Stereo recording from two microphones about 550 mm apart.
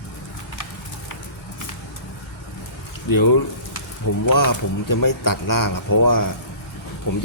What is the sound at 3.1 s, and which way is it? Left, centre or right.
Speech, left.